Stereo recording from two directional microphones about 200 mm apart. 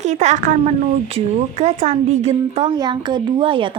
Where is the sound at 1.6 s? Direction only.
35° right (ahead or behind).